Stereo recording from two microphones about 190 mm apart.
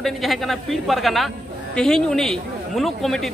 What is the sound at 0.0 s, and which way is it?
A man's voice, centre (ahead or behind).